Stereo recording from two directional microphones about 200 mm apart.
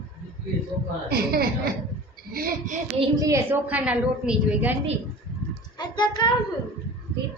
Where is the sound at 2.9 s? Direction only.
15° right (ahead or behind).